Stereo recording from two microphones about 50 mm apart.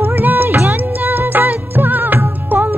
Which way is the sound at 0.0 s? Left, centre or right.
Right.